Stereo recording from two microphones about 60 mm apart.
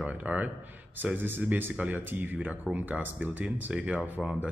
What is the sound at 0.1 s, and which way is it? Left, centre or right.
Speech, right.